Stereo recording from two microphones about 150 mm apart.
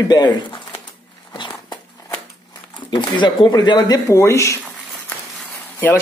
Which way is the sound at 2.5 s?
30° left (ahead or behind).